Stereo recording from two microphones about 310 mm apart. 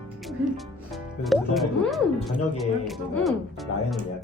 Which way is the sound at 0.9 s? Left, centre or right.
Centre.